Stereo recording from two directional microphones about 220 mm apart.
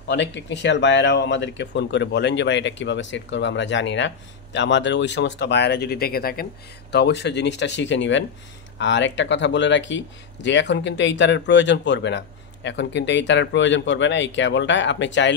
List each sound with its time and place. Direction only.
0.1 s speech: 55° left (ahead or behind)